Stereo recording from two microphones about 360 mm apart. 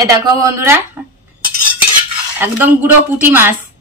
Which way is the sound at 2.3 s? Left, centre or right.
Centre.